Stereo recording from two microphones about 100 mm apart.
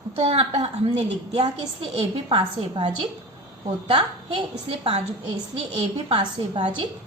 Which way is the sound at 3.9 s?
65° right (ahead or behind).